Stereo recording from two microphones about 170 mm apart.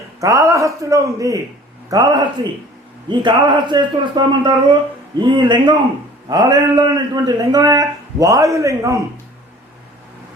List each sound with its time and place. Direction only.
0.2 s a man's voice: 20° right (ahead or behind)